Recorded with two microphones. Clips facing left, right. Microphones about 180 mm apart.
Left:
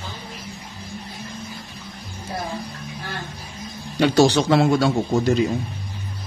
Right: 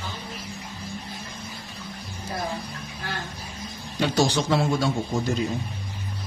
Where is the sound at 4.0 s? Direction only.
70° left (ahead or behind).